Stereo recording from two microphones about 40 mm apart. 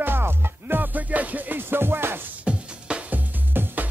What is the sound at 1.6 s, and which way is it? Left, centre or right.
Music, right.